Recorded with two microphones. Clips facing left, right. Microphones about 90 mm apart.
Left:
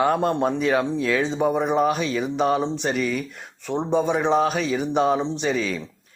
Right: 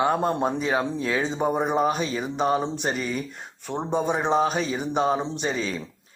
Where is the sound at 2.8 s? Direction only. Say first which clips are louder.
Left 3 dB; 35° right (ahead or behind).